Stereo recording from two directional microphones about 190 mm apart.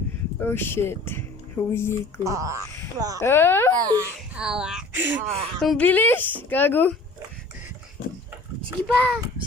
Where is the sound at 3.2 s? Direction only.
10° left (ahead or behind).